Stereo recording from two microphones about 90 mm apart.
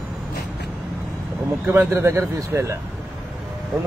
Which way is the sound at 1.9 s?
30° right (ahead or behind).